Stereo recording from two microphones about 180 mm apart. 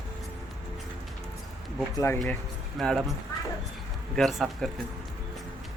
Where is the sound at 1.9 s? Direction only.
15° left (ahead or behind).